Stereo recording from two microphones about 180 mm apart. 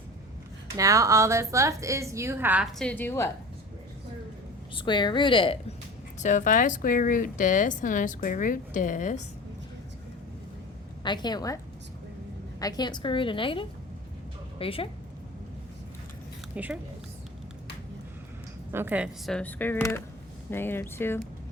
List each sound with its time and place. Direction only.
0.8 s a woman's voice: 20° right (ahead or behind)
2.7 s speech: 10° left (ahead or behind)
4.7 s a woman's voice: 25° left (ahead or behind)
6.1 s speech: 45° left (ahead or behind)
11.0 s a woman's voice: 25° left (ahead or behind)
16.6 s a woman's voice: 10° right (ahead or behind)
18.7 s speech: 10° right (ahead or behind); by 21.2 s 15° left (ahead or behind)